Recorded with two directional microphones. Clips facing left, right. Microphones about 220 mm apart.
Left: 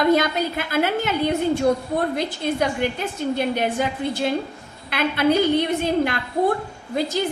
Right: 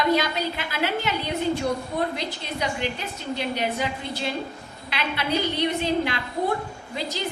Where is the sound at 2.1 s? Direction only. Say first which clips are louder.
Left 8 dB; 50° left (ahead or behind).